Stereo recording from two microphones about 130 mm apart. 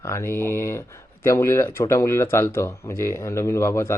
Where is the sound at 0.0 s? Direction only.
20° left (ahead or behind).